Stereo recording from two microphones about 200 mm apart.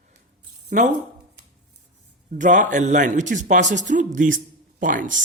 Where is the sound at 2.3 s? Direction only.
40° right (ahead or behind).